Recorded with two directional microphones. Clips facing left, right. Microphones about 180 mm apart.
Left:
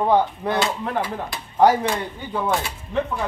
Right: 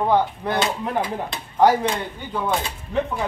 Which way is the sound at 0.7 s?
15° right (ahead or behind).